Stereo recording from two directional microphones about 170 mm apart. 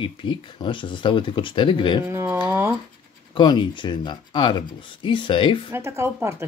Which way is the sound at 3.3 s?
25° left (ahead or behind).